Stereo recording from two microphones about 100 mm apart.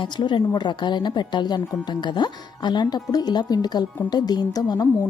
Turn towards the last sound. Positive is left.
turn(degrees=40)  # may be behind; listen again after turning